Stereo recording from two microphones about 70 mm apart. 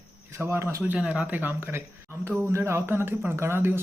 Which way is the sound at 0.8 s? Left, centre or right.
Right.